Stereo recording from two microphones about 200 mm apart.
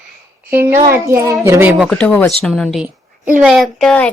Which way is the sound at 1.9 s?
5° left (ahead or behind).